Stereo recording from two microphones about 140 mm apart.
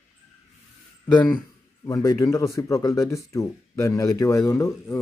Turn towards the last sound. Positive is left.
turn(degrees=25)  # may be behind; listen again after turning